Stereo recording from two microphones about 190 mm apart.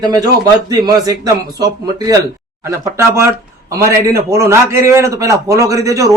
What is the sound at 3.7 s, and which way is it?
A man's voice, 15° right (ahead or behind).